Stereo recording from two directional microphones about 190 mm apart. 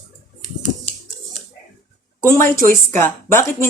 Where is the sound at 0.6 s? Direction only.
40° right (ahead or behind).